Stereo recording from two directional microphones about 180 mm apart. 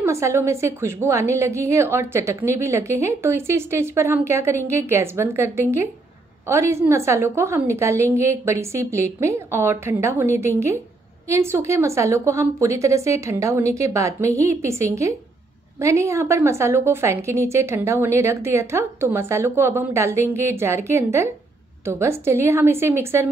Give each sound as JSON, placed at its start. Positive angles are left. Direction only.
{"t": 0.0, "sound": "a woman's voice", "side_deg": -15}